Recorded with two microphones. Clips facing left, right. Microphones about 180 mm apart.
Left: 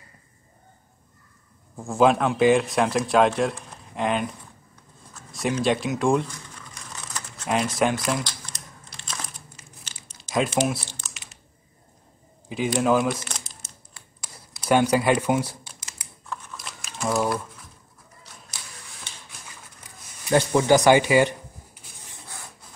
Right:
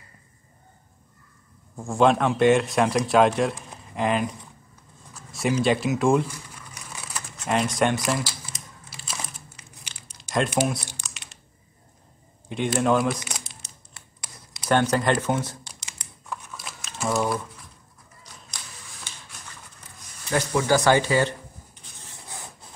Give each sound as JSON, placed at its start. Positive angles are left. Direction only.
{"t": 1.8, "sound": "speech", "side_deg": 0}
{"t": 5.3, "sound": "crumpling", "side_deg": 0}
{"t": 11.0, "sound": "typing", "side_deg": 0}
{"t": 12.4, "sound": "speech", "side_deg": 0}
{"t": 14.2, "sound": "a sound", "side_deg": 0}
{"t": 15.2, "sound": "speech", "side_deg": 10}
{"t": 16.5, "sound": "a sound", "side_deg": 0}
{"t": 20.2, "sound": "writing", "side_deg": 20}